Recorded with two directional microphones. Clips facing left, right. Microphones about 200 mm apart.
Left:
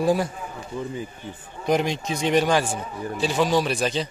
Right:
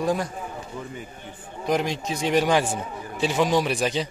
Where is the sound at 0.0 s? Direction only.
5° left (ahead or behind).